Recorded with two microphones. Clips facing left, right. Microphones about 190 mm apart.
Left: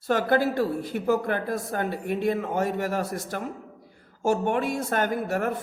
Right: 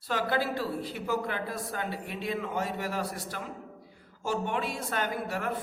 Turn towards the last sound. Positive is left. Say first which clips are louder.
# left 7 dB
turn(degrees=45)  # may be behind; listen again after turning